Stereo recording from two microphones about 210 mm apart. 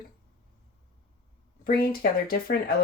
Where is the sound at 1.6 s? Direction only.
45° left (ahead or behind).